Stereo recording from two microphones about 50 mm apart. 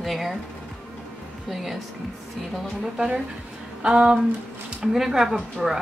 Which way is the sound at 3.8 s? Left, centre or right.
Centre.